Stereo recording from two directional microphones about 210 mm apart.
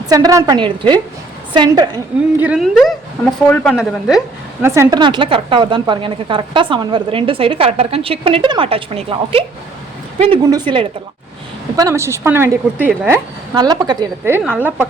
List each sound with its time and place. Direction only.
0.1 s a woman's voice: 15° right (ahead or behind)
2.4 s a woman's voice: 5° right (ahead or behind)
4.6 s a woman's voice: 15° right (ahead or behind)